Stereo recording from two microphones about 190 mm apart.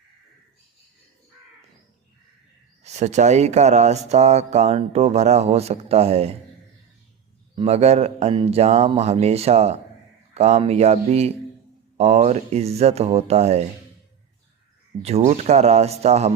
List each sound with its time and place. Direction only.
2.8 s speech: 35° right (ahead or behind)
7.5 s speech: 30° right (ahead or behind)
15.0 s speech: 35° right (ahead or behind)